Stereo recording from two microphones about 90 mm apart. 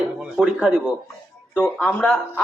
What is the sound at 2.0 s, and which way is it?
Speech, 20° left (ahead or behind).